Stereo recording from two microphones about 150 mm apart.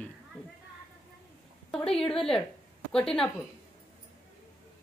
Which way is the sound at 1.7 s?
5° left (ahead or behind).